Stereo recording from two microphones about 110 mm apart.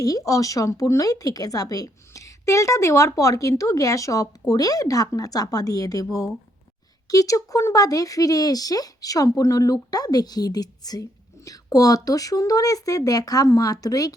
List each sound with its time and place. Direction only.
0.0 s speech: 30° left (ahead or behind)